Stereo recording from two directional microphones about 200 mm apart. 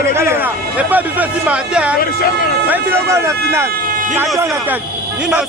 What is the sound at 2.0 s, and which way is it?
Speech, 45° left (ahead or behind).